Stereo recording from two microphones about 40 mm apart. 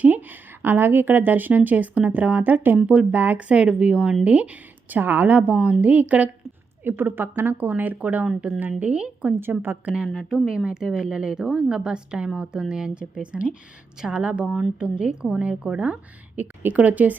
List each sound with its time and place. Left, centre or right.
0.0 s a woman's voice: right
3.3 s a woman's voice: right
4.9 s a woman's voice: right
5.4 s speech: right
6.8 s a woman's voice: right
7.6 s a woman's voice: right
7.9 s speech: right
10.2 s a woman's voice: centre
12.9 s a woman's voice: right
14.4 s speech: centre
14.8 s a woman's voice: right
15.9 s a woman's voice: right